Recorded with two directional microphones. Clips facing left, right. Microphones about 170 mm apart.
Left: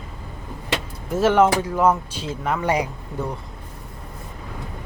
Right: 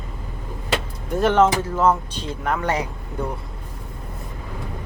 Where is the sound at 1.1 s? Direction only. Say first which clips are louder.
Even; 5° left (ahead or behind).